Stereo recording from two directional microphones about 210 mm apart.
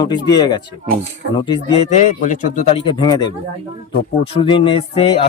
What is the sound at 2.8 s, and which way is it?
Speech, 20° left (ahead or behind).